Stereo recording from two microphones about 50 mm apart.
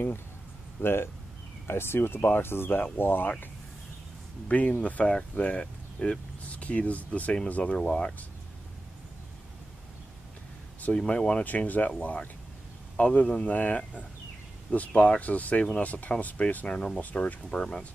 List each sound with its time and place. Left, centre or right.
0.7 s speech: left
4.5 s a man's voice: left
6.4 s a man's voice: left
11.0 s a man's voice: left